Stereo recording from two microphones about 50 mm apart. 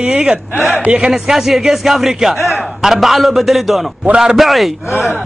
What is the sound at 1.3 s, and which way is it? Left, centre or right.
Speech, centre.